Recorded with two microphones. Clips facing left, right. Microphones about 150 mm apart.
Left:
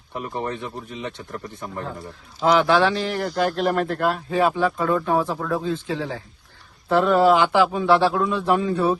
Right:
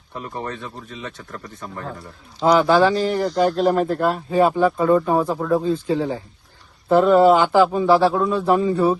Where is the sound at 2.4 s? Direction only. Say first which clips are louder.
Right 3 dB; centre (ahead or behind).